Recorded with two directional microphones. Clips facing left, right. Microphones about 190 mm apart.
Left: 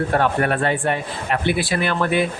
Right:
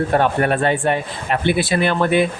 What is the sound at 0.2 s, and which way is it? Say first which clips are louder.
A man's voice: right 2 dB; 25° right (ahead or behind).